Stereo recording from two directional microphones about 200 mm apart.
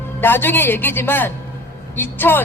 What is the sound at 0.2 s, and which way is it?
A woman's voice, 10° left (ahead or behind).